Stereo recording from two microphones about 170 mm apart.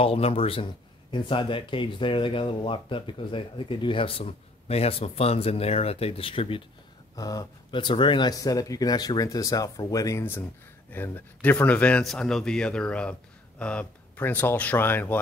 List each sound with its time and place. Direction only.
0.0 s speech: 35° left (ahead or behind)
7.2 s speech: 20° left (ahead or behind)